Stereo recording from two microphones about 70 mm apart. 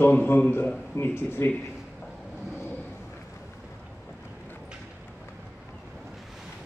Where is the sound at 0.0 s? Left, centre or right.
Left.